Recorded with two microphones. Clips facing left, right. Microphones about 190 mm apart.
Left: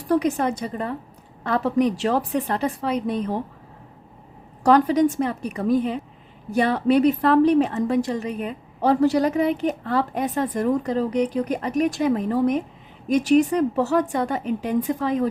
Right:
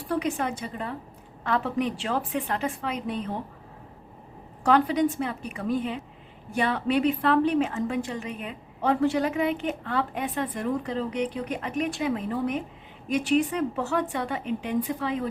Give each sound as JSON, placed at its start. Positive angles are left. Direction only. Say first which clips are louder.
{"t": 0.1, "sound": "a woman's voice", "louder": "left 7 dB", "side_deg": 40}
{"t": 4.6, "sound": "a woman's voice", "louder": "left 5 dB", "side_deg": 40}